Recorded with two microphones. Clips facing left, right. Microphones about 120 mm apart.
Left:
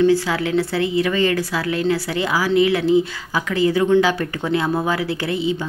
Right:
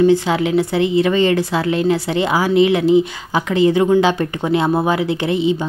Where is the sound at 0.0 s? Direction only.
20° right (ahead or behind).